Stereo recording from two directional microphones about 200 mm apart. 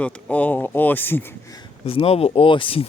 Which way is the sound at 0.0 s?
5° left (ahead or behind).